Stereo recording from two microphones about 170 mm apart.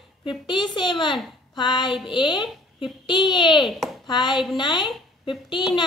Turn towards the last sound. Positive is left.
turn(degrees=25)  # may be behind; listen again after turning